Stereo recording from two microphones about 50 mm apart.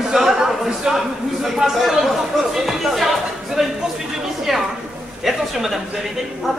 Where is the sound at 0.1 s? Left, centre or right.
Centre.